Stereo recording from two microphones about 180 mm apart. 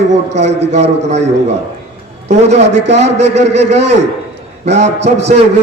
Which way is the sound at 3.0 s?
40° right (ahead or behind).